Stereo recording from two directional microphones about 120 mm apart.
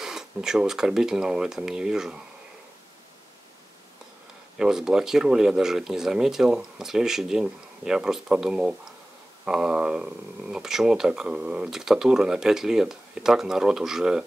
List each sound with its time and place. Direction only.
0.0 s speech: 5° right (ahead or behind)
4.6 s speech: 5° right (ahead or behind)